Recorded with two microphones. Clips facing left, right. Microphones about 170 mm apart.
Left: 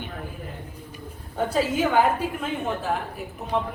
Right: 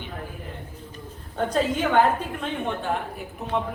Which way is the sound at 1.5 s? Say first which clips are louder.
Even; 5° left (ahead or behind).